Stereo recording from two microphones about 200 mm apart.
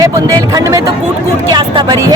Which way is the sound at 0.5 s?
15° right (ahead or behind).